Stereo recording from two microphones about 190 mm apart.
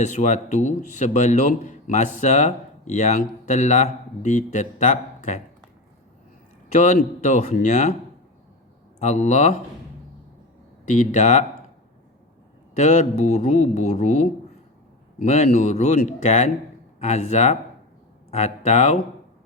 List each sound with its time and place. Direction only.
0.0 s speech: 40° left (ahead or behind)
6.7 s speech: 40° left (ahead or behind)
9.0 s speech: 40° left (ahead or behind)
10.8 s speech: 40° left (ahead or behind)
12.7 s speech: 40° left (ahead or behind)